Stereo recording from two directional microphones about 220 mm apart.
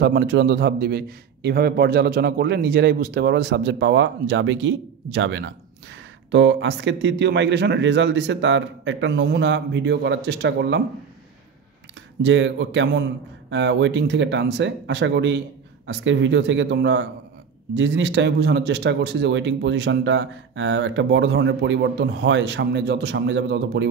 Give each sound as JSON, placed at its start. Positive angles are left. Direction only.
{"t": 0.0, "sound": "speech", "side_deg": -50}
{"t": 12.2, "sound": "a man's voice", "side_deg": -55}